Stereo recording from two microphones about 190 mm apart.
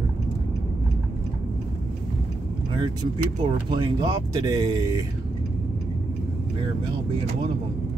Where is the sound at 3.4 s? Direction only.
20° right (ahead or behind).